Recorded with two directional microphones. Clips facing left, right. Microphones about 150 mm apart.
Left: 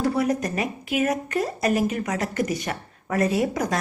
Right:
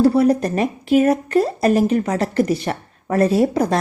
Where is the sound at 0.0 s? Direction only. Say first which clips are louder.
Right 8 dB; 30° right (ahead or behind).